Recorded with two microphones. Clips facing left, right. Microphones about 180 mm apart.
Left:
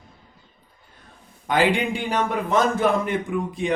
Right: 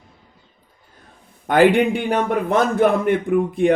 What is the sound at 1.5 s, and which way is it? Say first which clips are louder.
A man's voice: right 7 dB; 60° right (ahead or behind).